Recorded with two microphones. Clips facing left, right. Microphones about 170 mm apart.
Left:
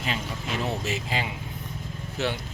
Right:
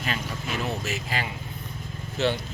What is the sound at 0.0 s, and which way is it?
Speech, 25° left (ahead or behind).